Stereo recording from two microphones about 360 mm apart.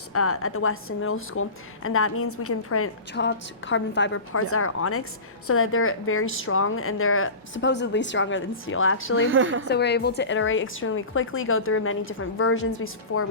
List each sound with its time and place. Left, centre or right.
0.1 s a woman's voice: left
9.3 s a woman's voice: right
9.6 s a woman's voice: left